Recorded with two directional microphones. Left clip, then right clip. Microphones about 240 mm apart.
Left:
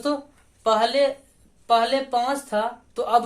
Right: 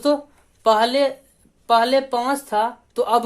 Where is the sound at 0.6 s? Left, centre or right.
Right.